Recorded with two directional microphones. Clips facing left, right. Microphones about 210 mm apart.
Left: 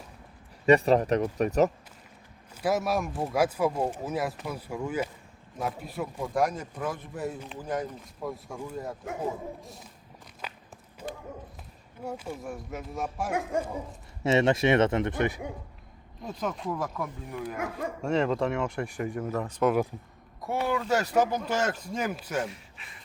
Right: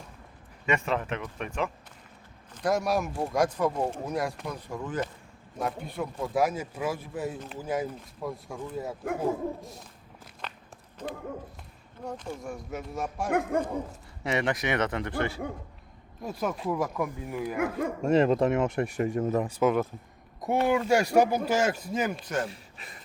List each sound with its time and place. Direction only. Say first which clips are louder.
0.6 s speech: left 8 dB; 35° left (ahead or behind)
2.6 s a man's voice: right 1 dB; 5° left (ahead or behind)
10.4 s run: even; 5° left (ahead or behind)
12.0 s a man's voice: even; 5° left (ahead or behind)
13.3 s speech: right 4 dB; 60° right (ahead or behind)
14.3 s speech: left 6 dB; 25° left (ahead or behind)
16.2 s speech: right 2 dB; 10° right (ahead or behind)
17.6 s speech: right 6 dB; 55° right (ahead or behind)
18.0 s speech: right 4 dB; 20° right (ahead or behind); by 22.4 s 10° left (ahead or behind)
22.4 s speech: even; 35° right (ahead or behind)